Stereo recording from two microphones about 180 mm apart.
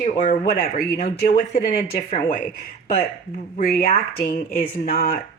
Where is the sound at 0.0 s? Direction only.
55° left (ahead or behind).